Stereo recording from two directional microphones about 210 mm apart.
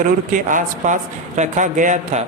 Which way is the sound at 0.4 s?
40° right (ahead or behind).